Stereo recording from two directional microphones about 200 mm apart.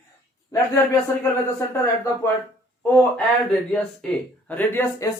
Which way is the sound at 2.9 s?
5° left (ahead or behind).